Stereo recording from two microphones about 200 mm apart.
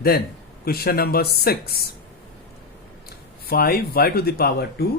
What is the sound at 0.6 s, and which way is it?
Speech, 50° left (ahead or behind).